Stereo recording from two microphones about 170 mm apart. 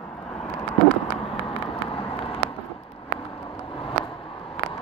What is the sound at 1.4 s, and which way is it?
Vehicle, 35° left (ahead or behind).